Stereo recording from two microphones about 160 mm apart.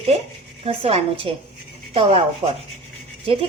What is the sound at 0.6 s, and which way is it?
A woman's voice, 35° right (ahead or behind).